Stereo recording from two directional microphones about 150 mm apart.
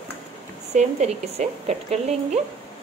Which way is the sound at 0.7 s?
50° right (ahead or behind).